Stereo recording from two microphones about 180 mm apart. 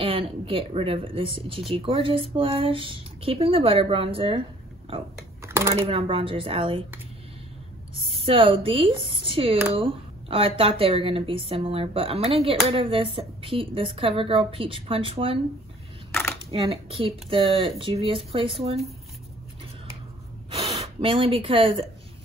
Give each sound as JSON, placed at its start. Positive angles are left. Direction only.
{"t": 0.0, "sound": "speech", "side_deg": -30}
{"t": 5.4, "sound": "a sound", "side_deg": -15}
{"t": 5.9, "sound": "a woman's voice", "side_deg": -30}
{"t": 7.9, "sound": "a woman's voice", "side_deg": -30}
{"t": 16.1, "sound": "a sound", "side_deg": 10}
{"t": 16.4, "sound": "speech", "side_deg": -30}
{"t": 20.4, "sound": "gasp", "side_deg": -35}